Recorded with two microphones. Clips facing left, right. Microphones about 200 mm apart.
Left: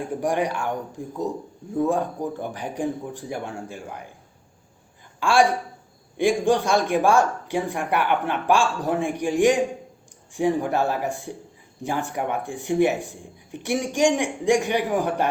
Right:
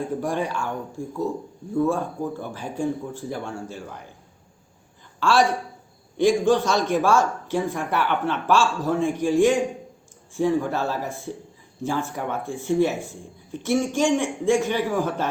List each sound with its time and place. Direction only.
0.2 s speech: 15° left (ahead or behind)
5.2 s speech: 15° left (ahead or behind)